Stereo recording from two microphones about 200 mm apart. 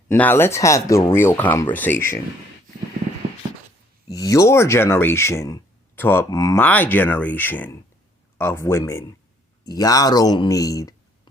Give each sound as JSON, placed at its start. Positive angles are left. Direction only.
{"t": 0.1, "sound": "speech", "side_deg": 10}
{"t": 4.1, "sound": "speech", "side_deg": 15}